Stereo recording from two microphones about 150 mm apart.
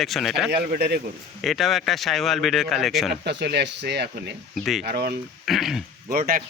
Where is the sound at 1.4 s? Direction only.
Centre (ahead or behind).